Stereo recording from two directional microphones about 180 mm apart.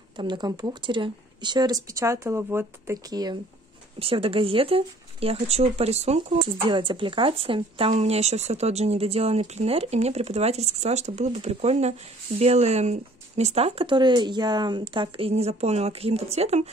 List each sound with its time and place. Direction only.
0.2 s speech: 25° right (ahead or behind)